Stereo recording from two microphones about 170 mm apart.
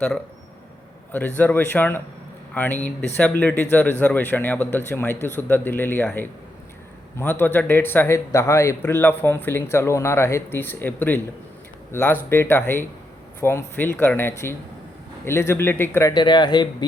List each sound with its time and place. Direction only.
1.4 s a man's voice: 10° left (ahead or behind)
7.2 s a man's voice: 15° left (ahead or behind)